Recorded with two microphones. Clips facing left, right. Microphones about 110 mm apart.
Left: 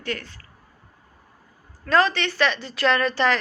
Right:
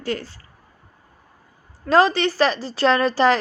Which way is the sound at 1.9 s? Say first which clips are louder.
Right 4 dB; 30° right (ahead or behind).